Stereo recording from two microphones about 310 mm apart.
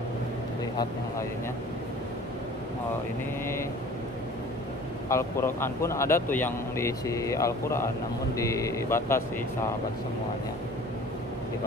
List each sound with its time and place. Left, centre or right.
5.1 s speech: centre